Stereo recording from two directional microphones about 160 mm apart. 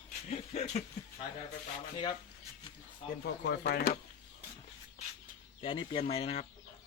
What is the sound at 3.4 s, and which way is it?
Speech, 90° left.